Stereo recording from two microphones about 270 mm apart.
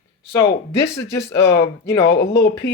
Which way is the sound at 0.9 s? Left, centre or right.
Centre.